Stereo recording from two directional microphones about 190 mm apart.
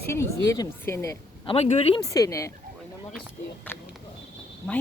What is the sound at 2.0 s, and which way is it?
Speech, 20° left (ahead or behind).